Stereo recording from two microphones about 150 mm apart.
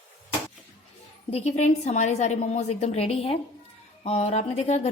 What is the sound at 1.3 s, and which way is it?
A woman's voice, 50° left (ahead or behind).